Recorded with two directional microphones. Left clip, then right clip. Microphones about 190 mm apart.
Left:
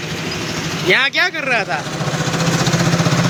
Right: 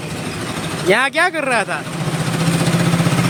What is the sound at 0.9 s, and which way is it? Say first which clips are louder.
Speech: even; 45° right (ahead or behind).